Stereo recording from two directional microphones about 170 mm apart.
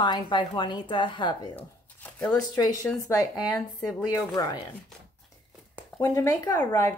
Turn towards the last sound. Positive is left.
turn(degrees=15)  # may be behind; listen again after turning